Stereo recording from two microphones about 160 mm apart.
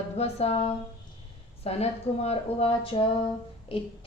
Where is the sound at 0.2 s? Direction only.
40° left (ahead or behind).